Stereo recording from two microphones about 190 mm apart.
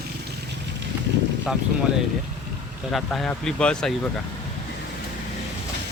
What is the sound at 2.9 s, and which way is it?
Speech, centre (ahead or behind).